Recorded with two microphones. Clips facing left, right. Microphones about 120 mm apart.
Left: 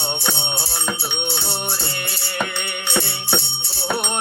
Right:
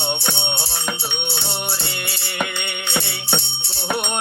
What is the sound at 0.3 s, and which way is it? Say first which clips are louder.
Music: even; 10° left (ahead or behind).